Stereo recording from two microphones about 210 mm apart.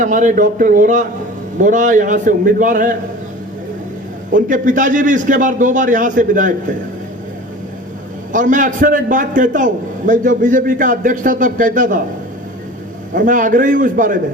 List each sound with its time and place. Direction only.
0.0 s a man's voice: 35° right (ahead or behind)
4.3 s a man's voice: 40° right (ahead or behind)
8.3 s a man's voice: 40° right (ahead or behind)
13.1 s a man's voice: 40° right (ahead or behind)